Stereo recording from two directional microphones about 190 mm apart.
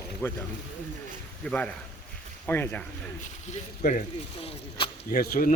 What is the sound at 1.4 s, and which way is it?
Speech, 5° left (ahead or behind).